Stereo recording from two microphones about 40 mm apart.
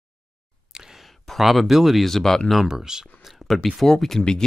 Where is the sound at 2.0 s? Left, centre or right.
Centre.